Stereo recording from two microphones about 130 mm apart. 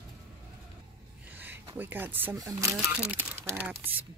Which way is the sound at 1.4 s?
15° right (ahead or behind).